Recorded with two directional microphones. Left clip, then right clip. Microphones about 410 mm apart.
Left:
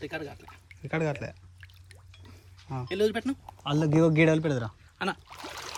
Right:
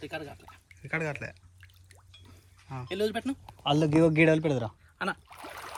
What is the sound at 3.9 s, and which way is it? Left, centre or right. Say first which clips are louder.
Speech: left 1 dB; centre.